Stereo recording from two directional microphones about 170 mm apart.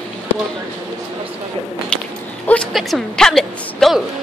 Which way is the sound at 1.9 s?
5° left (ahead or behind).